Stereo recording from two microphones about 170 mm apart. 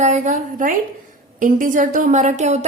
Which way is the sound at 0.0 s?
45° right (ahead or behind).